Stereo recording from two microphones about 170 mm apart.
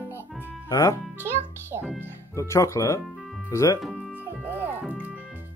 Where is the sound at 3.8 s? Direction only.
5° right (ahead or behind).